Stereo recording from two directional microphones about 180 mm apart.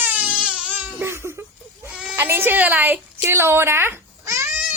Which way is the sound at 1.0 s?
15° right (ahead or behind).